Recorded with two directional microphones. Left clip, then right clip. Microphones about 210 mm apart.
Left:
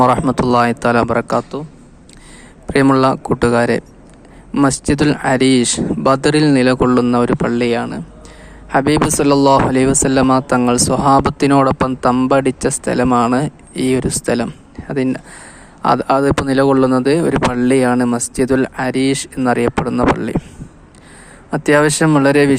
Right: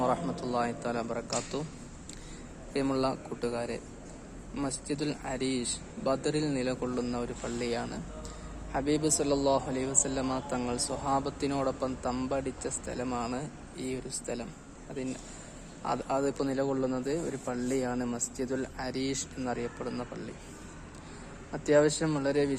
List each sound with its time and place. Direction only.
0.0 s speech: 45° left (ahead or behind)
2.7 s speech: 40° left (ahead or behind)
21.5 s speech: 35° left (ahead or behind)